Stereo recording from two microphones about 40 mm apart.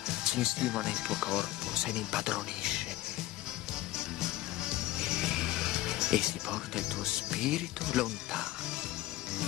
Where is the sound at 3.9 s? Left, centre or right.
Centre.